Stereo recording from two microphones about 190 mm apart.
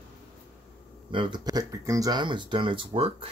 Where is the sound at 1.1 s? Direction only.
25° right (ahead or behind).